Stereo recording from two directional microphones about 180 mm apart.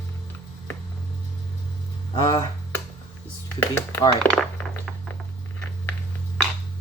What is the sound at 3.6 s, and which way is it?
Speech, 15° left (ahead or behind).